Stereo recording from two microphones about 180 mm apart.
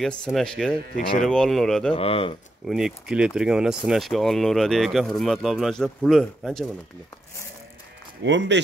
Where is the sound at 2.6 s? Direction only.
Centre (ahead or behind).